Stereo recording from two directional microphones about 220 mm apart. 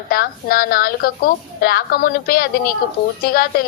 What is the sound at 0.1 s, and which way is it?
A woman's voice, 40° left (ahead or behind).